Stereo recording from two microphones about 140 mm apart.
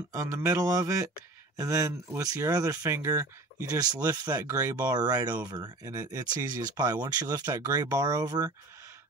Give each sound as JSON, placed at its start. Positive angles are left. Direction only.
{"t": 0.1, "sound": "speech", "side_deg": -25}